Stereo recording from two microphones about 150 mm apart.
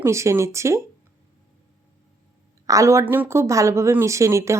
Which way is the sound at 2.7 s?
20° right (ahead or behind).